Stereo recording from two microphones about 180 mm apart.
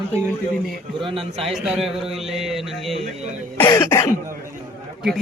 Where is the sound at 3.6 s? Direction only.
15° left (ahead or behind).